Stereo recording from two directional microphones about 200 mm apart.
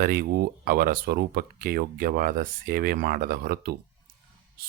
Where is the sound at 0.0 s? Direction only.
45° right (ahead or behind).